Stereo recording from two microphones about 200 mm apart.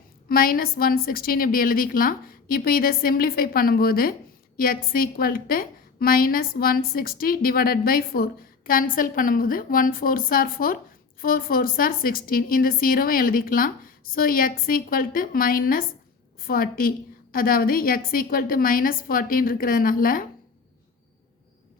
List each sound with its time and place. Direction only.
0.3 s a woman's voice: 45° left (ahead or behind)